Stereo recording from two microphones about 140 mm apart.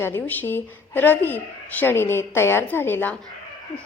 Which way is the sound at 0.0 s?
15° left (ahead or behind).